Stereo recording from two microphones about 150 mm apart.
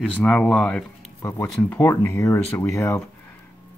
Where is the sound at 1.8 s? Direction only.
20° left (ahead or behind).